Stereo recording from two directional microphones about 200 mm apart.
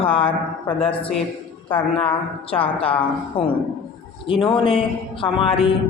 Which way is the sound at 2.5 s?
30° left (ahead or behind).